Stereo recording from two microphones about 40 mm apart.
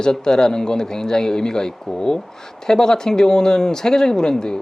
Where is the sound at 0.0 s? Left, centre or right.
Centre.